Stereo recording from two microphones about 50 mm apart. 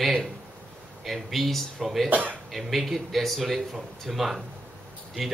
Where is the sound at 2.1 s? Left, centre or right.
Right.